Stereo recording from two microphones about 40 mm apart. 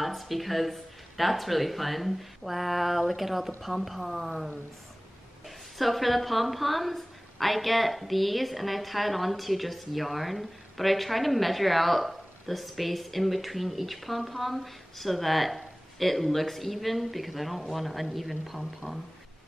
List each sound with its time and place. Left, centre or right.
0.0 s a woman's voice: centre
5.8 s a woman's voice: centre